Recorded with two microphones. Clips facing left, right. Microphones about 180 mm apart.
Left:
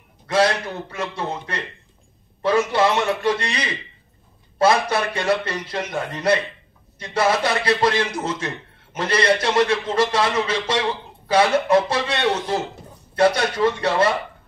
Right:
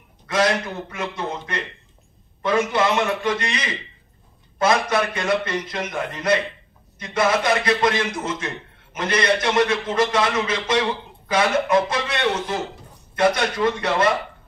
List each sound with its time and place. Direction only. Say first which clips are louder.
0.3 s a man's voice: left 1 dB; 30° left (ahead or behind)